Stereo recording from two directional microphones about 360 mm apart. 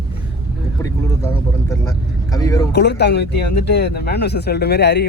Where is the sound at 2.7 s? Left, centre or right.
Left.